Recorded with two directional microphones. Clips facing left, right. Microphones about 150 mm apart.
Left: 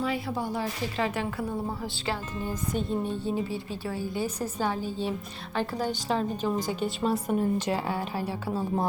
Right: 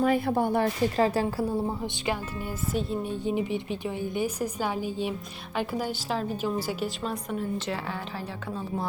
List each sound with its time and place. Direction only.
0.0 s speech: 50° right (ahead or behind)
0.9 s a woman's voice: 35° right (ahead or behind)
2.7 s a woman's voice: 5° right (ahead or behind)
7.0 s a woman's voice: 10° left (ahead or behind)
8.5 s speech: 35° left (ahead or behind)